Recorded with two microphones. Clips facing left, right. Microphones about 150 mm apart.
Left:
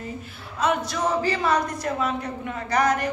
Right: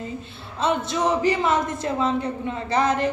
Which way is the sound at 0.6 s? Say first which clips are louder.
Right 1 dB; 25° right (ahead or behind).